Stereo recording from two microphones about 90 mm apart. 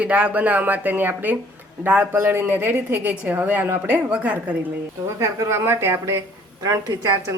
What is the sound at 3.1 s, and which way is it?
A woman's voice, 15° right (ahead or behind).